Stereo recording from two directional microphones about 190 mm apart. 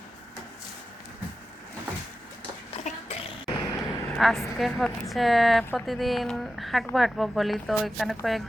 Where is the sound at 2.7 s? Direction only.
35° left (ahead or behind).